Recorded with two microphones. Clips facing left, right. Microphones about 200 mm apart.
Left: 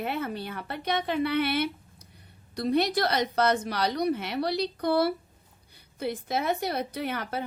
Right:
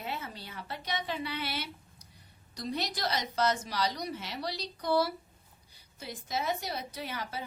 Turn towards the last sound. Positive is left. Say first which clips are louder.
# left 7 dB
turn(degrees=60)  # may be behind; listen again after turning